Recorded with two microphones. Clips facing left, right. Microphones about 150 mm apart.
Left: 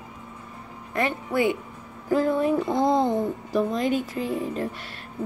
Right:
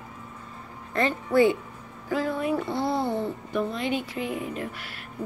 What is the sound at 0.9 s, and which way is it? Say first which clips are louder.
Speech: right 3 dB; 15° left (ahead or behind).